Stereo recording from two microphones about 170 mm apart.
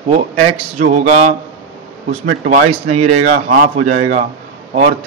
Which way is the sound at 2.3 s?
60° right (ahead or behind).